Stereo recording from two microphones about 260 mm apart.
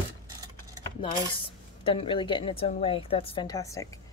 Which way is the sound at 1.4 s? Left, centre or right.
Left.